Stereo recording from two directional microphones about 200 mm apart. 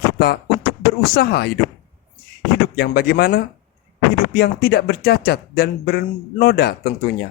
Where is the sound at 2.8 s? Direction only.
50° left (ahead or behind).